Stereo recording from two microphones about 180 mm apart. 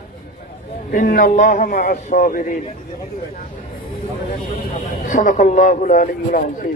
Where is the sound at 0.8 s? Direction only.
50° left (ahead or behind).